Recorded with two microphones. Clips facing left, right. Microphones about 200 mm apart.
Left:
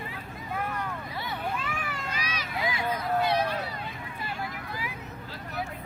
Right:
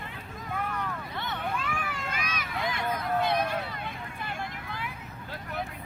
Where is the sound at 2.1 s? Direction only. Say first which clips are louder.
Even; 50° right (ahead or behind).